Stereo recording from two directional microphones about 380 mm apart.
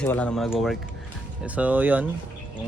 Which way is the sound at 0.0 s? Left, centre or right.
Centre.